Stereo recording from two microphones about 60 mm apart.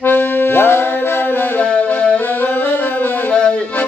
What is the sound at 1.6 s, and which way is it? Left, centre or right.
Music, left.